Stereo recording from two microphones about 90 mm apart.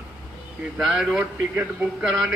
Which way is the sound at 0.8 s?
Centre (ahead or behind).